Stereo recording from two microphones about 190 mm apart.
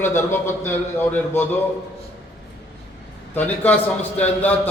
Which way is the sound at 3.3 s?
10° left (ahead or behind).